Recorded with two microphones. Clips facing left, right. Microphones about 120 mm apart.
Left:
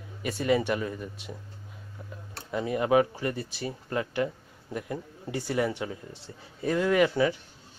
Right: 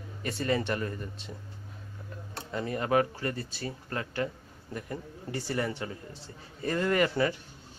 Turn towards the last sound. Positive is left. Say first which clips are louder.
# left 3 dB
turn(degrees=5)  # may be behind; listen again after turning